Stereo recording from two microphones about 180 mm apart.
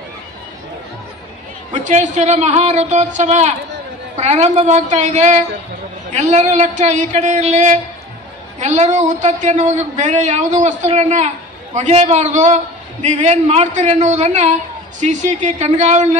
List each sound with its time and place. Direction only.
1.7 s a man's voice: 40° right (ahead or behind)